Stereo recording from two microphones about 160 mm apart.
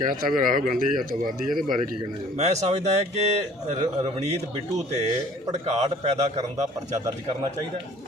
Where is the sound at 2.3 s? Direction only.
45° right (ahead or behind).